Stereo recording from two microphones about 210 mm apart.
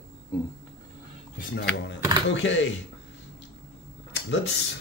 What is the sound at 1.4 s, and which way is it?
Speech, 45° left (ahead or behind).